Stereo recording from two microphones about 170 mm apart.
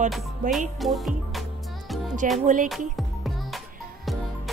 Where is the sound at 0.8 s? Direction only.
Centre (ahead or behind).